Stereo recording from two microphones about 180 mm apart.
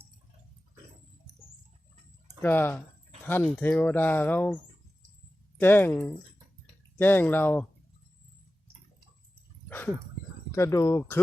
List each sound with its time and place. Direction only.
2.4 s speech: 10° left (ahead or behind)
5.5 s speech: 10° left (ahead or behind)
7.0 s speech: 10° left (ahead or behind)
9.6 s dog: 10° left (ahead or behind)
10.5 s speech: 15° left (ahead or behind)